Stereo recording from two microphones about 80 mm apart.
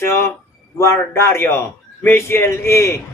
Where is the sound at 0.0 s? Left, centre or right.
Left.